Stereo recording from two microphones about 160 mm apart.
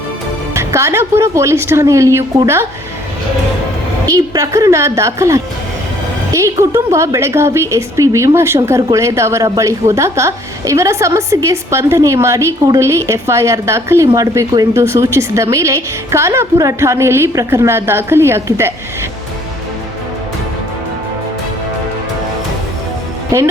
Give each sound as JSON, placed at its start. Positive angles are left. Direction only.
{"t": 0.5, "sound": "a woman's voice", "side_deg": -15}
{"t": 4.0, "sound": "a woman's voice", "side_deg": -20}
{"t": 23.3, "sound": "a woman's voice", "side_deg": -20}